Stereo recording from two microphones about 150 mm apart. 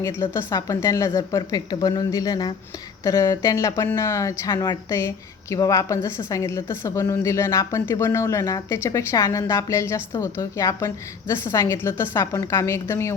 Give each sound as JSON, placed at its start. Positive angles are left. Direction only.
{"t": 0.0, "sound": "a woman's voice", "side_deg": 15}